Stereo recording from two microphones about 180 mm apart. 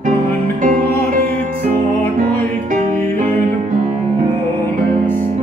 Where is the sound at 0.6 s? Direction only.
45° right (ahead or behind).